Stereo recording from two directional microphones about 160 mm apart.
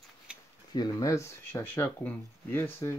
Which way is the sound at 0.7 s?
25° left (ahead or behind).